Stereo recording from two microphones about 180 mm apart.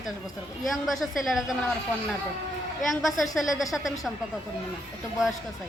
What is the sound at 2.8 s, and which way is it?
A woman's voice, centre (ahead or behind).